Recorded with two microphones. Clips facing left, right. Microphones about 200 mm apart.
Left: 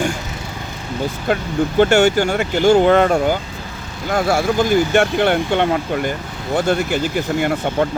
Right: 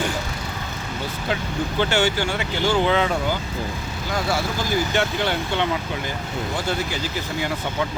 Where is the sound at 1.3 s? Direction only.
50° left (ahead or behind).